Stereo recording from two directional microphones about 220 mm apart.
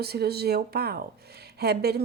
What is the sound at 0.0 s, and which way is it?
A woman's voice, 45° right (ahead or behind).